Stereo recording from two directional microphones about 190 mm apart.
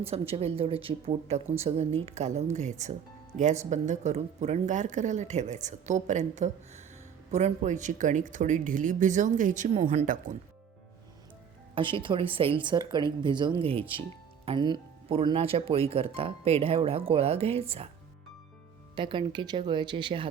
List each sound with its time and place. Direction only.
0.0 s speech: 30° right (ahead or behind)
11.7 s speech: 25° right (ahead or behind)
18.9 s speech: 25° right (ahead or behind)